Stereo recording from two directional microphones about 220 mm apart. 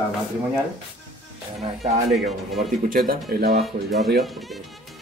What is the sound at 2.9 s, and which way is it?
Speech, 40° right (ahead or behind).